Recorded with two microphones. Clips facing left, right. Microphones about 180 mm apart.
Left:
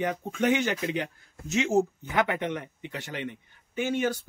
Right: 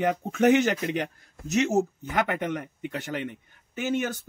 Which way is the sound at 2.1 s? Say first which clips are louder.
Even; 45° right (ahead or behind).